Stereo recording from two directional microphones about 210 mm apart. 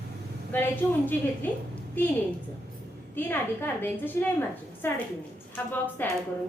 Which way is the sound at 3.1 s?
10° left (ahead or behind).